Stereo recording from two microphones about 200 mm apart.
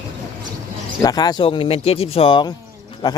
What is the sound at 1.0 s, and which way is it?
Speech, 20° left (ahead or behind).